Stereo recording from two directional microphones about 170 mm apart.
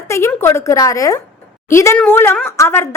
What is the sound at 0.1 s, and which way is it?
Speech, 15° left (ahead or behind).